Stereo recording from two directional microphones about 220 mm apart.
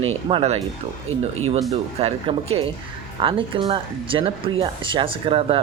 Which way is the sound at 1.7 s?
25° right (ahead or behind).